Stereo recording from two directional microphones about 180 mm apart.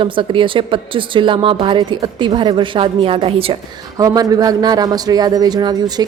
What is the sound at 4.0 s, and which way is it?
A woman's voice, 20° right (ahead or behind).